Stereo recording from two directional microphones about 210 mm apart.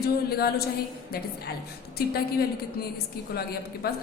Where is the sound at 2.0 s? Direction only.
50° left (ahead or behind).